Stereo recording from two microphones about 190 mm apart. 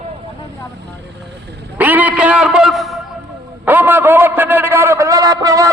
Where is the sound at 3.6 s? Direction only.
10° right (ahead or behind).